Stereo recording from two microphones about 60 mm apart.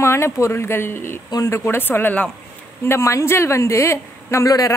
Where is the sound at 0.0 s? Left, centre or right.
Left.